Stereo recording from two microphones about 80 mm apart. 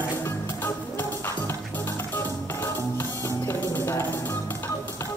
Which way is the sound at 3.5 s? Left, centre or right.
Left.